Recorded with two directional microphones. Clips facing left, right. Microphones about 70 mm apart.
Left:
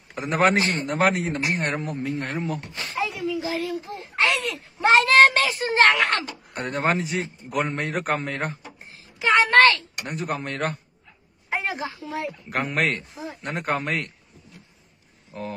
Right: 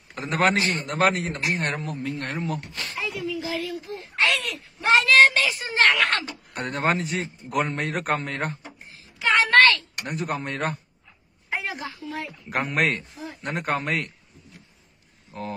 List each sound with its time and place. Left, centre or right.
0.1 s a man's voice: centre
0.6 s speech: left
0.8 s a man's voice: centre
2.7 s speech: left
6.0 s a man's voice: centre
9.3 s a woman's voice: left
10.0 s a man's voice: centre
11.5 s a sound: left
12.4 s a man's voice: centre
15.3 s a man's voice: centre